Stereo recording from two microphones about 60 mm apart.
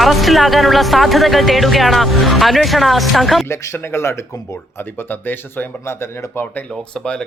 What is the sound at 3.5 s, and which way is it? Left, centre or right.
Speech, left.